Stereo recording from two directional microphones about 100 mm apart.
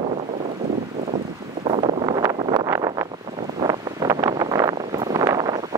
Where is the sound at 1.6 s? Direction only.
70° right (ahead or behind).